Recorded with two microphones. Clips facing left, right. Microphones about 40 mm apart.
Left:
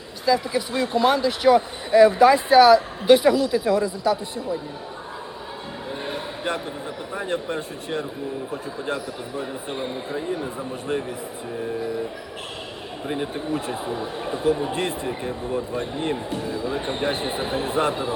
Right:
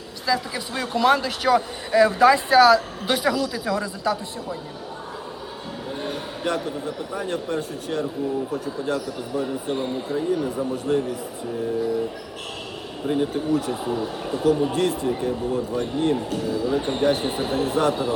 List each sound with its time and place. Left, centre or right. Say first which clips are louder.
0.3 s speech: left 4 dB; left
6.1 s speech: right 1 dB; left
9.5 s speech: right 3 dB; centre
10.1 s speech: right 4 dB; left
13.1 s speech: right 5 dB; left